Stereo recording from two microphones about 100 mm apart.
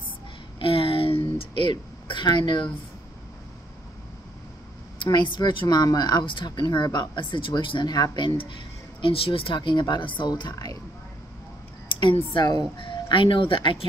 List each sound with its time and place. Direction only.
0.6 s a sound: 70° left (ahead or behind); by 2.7 s 50° left (ahead or behind)
5.0 s speech: 50° left (ahead or behind)
7.9 s speech: 40° left (ahead or behind)
9.0 s speech: 70° left (ahead or behind); by 10.5 s 50° left (ahead or behind)
12.4 s speech: 45° left (ahead or behind)